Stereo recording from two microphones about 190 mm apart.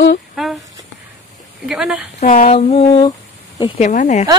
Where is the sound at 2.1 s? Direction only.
45° left (ahead or behind).